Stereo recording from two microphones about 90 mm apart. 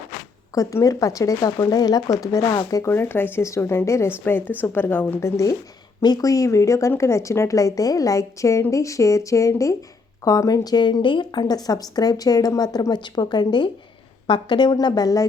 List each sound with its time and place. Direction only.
0.5 s speech: 40° left (ahead or behind)
2.9 s speech: 25° left (ahead or behind)
6.0 s a woman's voice: 45° left (ahead or behind)